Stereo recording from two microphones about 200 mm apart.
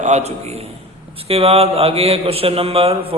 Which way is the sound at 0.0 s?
35° right (ahead or behind).